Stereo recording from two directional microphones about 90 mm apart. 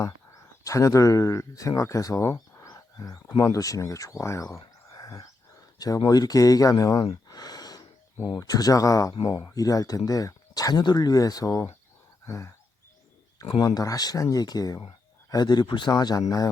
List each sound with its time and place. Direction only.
0.0 s speech: 35° left (ahead or behind)
12.2 s a sound: 35° left (ahead or behind)
13.6 s speech: 45° left (ahead or behind)